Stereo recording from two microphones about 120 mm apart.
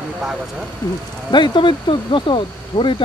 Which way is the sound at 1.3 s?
40° left (ahead or behind).